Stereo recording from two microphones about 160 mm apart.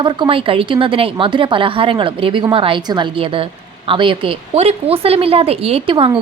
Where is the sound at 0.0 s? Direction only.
35° right (ahead or behind).